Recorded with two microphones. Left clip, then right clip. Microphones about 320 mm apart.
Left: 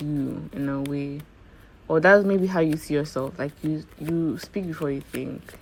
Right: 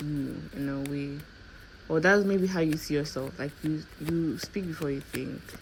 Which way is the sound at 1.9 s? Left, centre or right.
Centre.